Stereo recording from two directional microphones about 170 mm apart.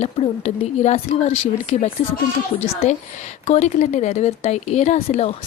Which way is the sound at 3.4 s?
40° left (ahead or behind).